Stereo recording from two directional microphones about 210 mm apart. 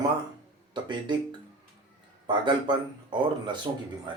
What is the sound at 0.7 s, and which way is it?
Speech, 20° right (ahead or behind).